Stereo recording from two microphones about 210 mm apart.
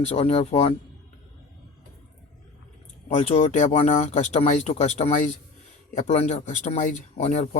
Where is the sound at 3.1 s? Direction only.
30° left (ahead or behind).